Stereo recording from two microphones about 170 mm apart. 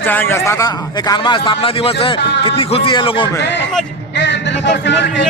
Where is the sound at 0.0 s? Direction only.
10° left (ahead or behind); by 3.4 s 30° left (ahead or behind).